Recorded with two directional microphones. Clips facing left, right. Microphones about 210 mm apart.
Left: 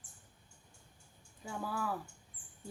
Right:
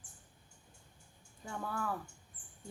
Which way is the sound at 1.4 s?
5° left (ahead or behind).